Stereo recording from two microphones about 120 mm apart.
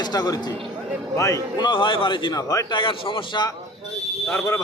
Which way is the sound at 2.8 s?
45° left (ahead or behind).